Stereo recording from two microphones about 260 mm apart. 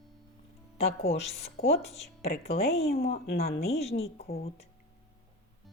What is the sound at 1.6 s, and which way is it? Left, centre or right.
Speech, left.